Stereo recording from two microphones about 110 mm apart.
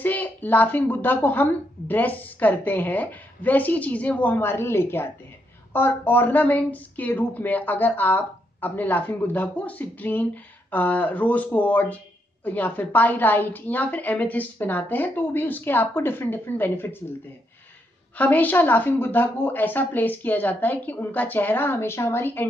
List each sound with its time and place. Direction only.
0.0 s speech: 15° left (ahead or behind)
18.1 s speech: 15° left (ahead or behind)